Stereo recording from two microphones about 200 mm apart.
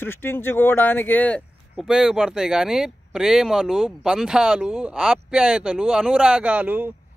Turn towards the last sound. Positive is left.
turn(degrees=-10)  # may be behind; listen again after turning